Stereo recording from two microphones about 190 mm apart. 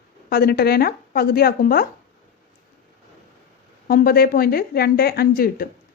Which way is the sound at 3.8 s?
50° left (ahead or behind).